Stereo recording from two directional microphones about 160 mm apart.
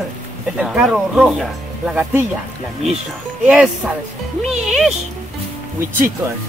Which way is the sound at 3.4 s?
5° right (ahead or behind).